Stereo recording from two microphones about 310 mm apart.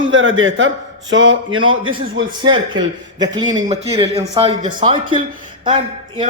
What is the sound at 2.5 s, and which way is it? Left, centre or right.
A man's voice, centre.